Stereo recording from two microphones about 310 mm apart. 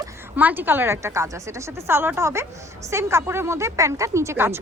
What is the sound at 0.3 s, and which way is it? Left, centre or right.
Speech, centre.